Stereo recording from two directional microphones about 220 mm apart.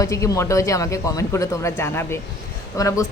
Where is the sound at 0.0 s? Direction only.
15° left (ahead or behind).